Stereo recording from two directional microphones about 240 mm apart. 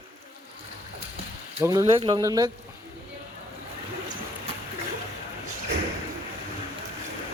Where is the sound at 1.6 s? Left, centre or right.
Centre.